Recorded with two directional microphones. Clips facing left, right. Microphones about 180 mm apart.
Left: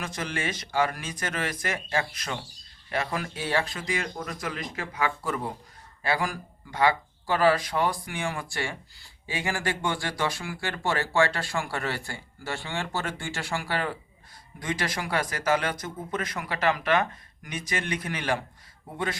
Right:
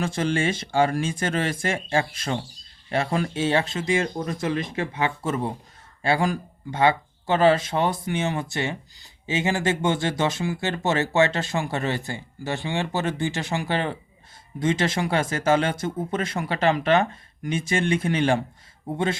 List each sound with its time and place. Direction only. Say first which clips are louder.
0.0 s speech: right 8 dB; 30° right (ahead or behind)